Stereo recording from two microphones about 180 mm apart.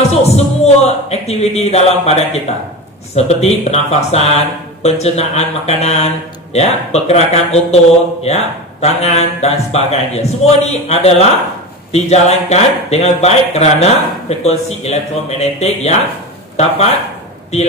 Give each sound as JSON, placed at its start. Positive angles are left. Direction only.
{"t": 0.1, "sound": "a man's voice", "side_deg": 35}